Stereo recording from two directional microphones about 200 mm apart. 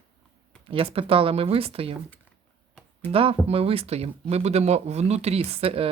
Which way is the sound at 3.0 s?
30° right (ahead or behind).